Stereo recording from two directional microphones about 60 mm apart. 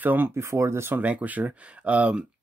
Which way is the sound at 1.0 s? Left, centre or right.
Right.